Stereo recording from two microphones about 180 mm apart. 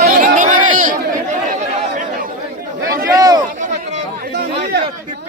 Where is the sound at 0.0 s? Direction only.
50° right (ahead or behind).